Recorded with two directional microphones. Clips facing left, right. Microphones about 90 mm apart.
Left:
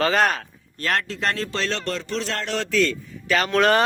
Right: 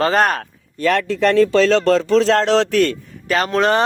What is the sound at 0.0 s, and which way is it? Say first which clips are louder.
Speech: right 4 dB; 45° right (ahead or behind).